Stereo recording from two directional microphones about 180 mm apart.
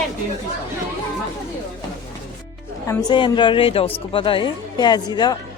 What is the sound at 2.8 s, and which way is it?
Speech, 20° left (ahead or behind).